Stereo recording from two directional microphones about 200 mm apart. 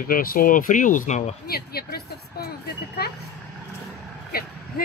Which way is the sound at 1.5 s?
50° left (ahead or behind).